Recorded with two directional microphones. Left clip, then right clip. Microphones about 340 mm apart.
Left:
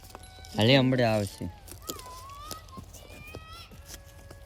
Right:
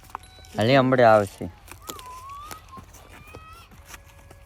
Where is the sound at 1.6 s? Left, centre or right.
Centre.